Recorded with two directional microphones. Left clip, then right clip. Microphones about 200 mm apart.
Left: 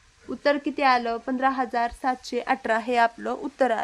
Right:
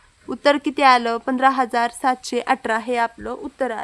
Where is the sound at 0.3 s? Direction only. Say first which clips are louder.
Right 6 dB; 30° right (ahead or behind).